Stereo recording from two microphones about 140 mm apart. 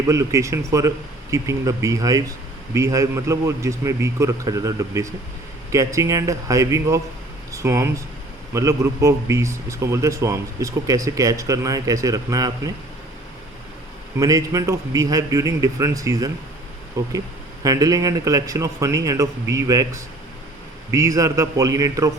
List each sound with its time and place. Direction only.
0.1 s a man's voice: 20° right (ahead or behind)
14.2 s a man's voice: 25° right (ahead or behind)